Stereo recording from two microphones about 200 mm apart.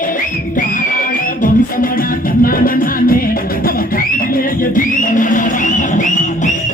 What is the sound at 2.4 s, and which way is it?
Music, 45° left (ahead or behind).